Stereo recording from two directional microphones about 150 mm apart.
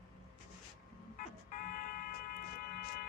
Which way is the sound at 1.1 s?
60° left (ahead or behind).